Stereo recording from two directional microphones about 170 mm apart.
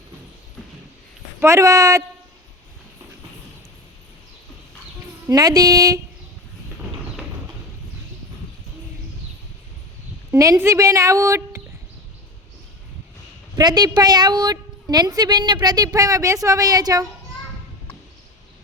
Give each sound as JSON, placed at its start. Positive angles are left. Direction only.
{"t": 1.4, "sound": "a woman's voice", "side_deg": -15}
{"t": 5.3, "sound": "a woman's voice", "side_deg": -20}
{"t": 10.3, "sound": "a woman's voice", "side_deg": -20}
{"t": 13.6, "sound": "a woman's voice", "side_deg": -25}